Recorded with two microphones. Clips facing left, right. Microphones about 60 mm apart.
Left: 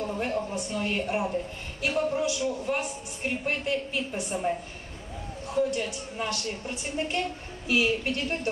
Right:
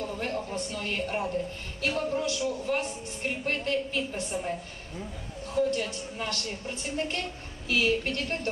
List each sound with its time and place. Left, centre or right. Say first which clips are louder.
0.0 s a woman's voice: left 3 dB; centre